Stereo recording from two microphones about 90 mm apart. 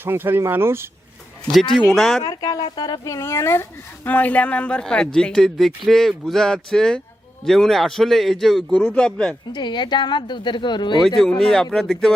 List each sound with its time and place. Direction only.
0.0 s speech: 25° right (ahead or behind)
1.9 s a man's voice: centre (ahead or behind)
2.2 s a man's voice: 45° left (ahead or behind); by 9.3 s 10° left (ahead or behind)
9.5 s speech: 55° left (ahead or behind)
11.2 s speech: 5° left (ahead or behind)